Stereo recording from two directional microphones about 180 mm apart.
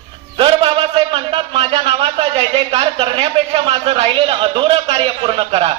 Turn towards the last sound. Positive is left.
turn(degrees=-30)  # may be behind; listen again after turning